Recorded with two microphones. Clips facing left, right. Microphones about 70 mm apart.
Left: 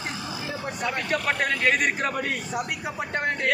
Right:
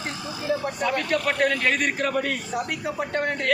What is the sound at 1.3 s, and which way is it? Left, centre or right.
Speech, centre.